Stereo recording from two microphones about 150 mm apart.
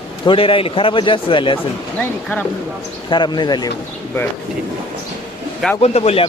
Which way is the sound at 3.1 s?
30° left (ahead or behind).